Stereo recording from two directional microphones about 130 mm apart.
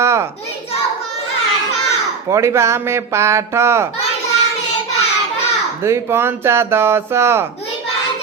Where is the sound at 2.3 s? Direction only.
20° right (ahead or behind).